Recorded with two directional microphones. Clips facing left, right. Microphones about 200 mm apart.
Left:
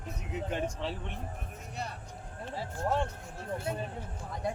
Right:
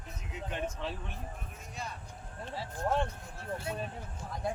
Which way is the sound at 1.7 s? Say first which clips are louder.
Left 2 dB; 65° left (ahead or behind).